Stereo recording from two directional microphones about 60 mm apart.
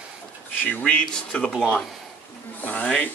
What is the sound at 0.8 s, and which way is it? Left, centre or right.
Speech, centre.